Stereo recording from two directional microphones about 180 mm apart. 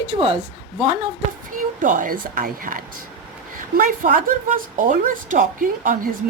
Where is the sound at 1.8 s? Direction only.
45° right (ahead or behind).